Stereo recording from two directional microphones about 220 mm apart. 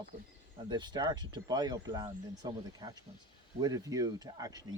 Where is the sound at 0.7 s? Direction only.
20° right (ahead or behind).